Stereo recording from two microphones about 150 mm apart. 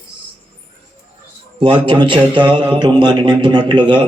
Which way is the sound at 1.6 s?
35° right (ahead or behind).